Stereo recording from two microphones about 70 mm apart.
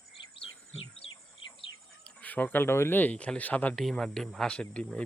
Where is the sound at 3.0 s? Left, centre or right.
Centre.